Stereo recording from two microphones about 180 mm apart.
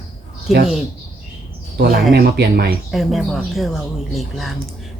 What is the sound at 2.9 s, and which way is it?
Speech, centre (ahead or behind).